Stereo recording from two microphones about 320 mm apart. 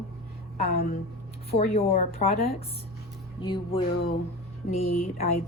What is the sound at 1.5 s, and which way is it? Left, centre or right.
Speech, left.